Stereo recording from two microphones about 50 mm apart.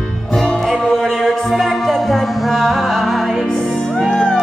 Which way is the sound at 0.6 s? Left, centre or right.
Centre.